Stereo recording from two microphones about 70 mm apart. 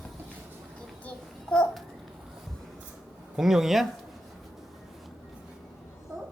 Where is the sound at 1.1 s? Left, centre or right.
Centre.